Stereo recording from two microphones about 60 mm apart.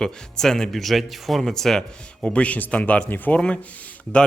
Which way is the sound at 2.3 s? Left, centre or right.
Left.